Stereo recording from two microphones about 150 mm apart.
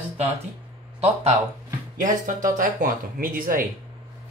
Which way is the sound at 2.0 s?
60° right (ahead or behind).